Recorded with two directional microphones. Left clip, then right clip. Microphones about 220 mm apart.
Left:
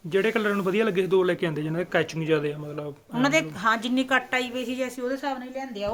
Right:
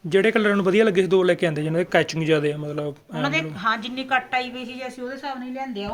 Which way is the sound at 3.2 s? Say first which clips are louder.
Left 2 dB; 55° left (ahead or behind).